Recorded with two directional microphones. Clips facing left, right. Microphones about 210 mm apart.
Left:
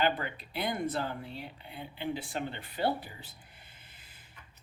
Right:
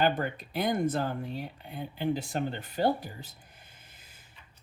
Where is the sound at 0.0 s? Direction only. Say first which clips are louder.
Right 3 dB; 45° right (ahead or behind).